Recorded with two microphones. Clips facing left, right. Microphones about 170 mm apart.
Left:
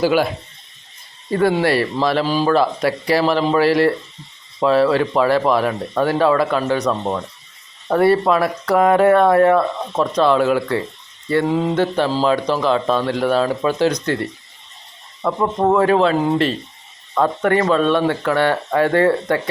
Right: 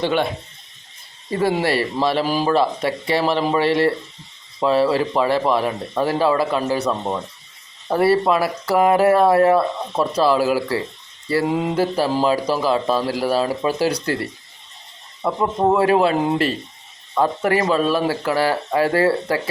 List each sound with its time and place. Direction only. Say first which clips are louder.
0.0 s speech: left 4 dB; 5° left (ahead or behind)
1.4 s a man's voice: left 3 dB; centre (ahead or behind)
2.6 s a man's voice: left 2 dB; centre (ahead or behind)